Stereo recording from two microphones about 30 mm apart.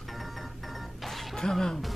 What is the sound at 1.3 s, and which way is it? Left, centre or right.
Music, centre.